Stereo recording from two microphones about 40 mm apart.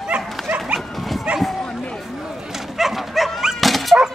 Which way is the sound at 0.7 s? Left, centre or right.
Centre.